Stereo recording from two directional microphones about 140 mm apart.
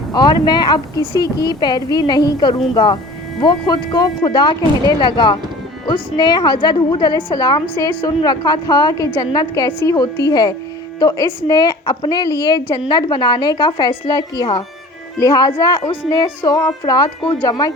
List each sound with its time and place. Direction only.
0.1 s a woman's voice: 30° left (ahead or behind)